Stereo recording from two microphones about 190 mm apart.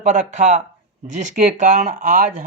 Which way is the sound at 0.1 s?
40° right (ahead or behind).